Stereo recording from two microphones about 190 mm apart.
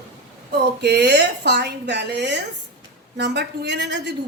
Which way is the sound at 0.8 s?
60° right (ahead or behind).